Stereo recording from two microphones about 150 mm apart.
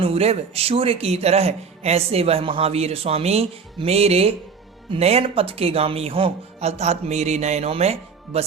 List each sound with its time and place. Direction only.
0.0 s a man's voice: 45° right (ahead or behind)